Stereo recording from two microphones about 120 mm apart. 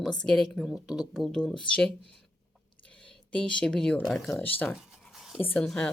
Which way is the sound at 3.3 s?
10° left (ahead or behind).